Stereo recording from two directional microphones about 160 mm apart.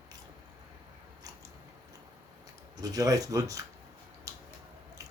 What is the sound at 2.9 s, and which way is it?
Speech, 20° right (ahead or behind).